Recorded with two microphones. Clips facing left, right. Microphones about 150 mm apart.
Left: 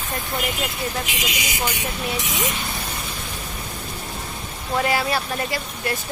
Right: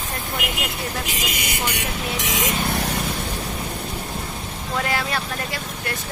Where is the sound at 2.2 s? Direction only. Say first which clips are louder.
Right 3 dB; 90° right.